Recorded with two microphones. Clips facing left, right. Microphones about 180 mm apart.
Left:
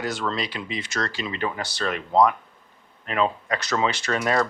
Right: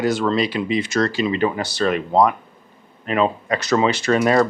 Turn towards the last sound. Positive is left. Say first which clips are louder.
# right 7 dB
turn(degrees=-10)  # may be behind; listen again after turning